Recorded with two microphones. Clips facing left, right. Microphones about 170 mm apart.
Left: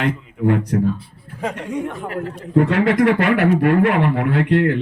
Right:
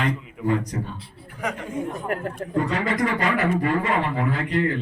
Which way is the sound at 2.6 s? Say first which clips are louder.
Left 8 dB; 65° left (ahead or behind).